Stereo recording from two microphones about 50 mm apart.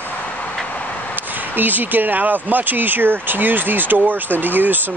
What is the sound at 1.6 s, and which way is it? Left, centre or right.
Speech, right.